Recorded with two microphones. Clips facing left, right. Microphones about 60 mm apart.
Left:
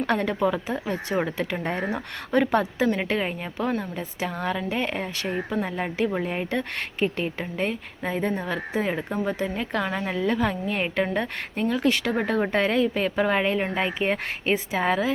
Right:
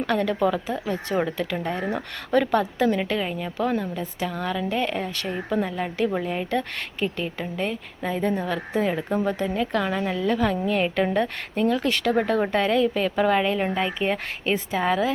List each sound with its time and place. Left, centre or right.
0.1 s speech: left
0.3 s speech: centre
0.7 s speech: left
1.9 s speech: centre